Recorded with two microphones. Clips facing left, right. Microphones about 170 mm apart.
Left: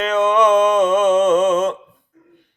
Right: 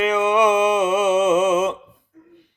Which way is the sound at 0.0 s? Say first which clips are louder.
Left 2 dB; 10° right (ahead or behind).